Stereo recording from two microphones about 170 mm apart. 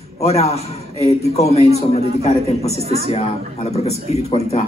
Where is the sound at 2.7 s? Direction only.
35° right (ahead or behind).